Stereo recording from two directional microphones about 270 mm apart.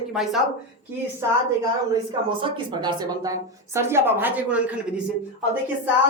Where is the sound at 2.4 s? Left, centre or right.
Centre.